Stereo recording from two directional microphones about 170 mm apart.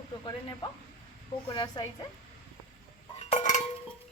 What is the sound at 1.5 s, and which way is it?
Speech, 25° left (ahead or behind).